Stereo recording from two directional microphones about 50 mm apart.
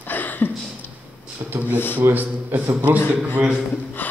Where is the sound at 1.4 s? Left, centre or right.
Right.